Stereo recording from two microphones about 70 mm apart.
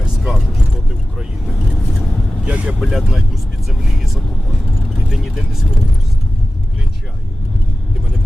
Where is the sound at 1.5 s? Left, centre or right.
Centre.